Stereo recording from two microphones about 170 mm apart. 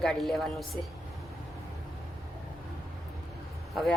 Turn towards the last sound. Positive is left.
turn(degrees=0)  # may be behind; listen again after turning